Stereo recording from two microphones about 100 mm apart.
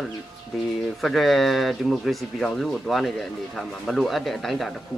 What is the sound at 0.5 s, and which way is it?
Speech, centre (ahead or behind).